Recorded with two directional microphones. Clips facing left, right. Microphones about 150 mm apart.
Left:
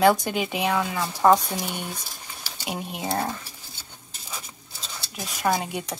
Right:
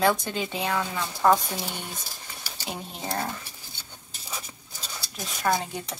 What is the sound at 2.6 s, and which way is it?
Speech, 15° left (ahead or behind).